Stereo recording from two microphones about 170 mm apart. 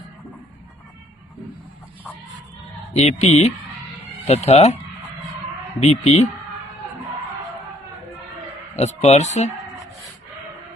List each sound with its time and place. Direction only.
2.9 s speech: 40° left (ahead or behind)
5.8 s speech: 40° left (ahead or behind)
8.7 s speech: 40° left (ahead or behind)